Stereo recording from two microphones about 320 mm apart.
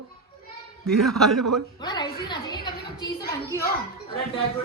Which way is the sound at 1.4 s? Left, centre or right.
Right.